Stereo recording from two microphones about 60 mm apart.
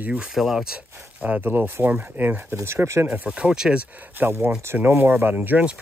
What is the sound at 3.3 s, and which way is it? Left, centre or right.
Speech, centre.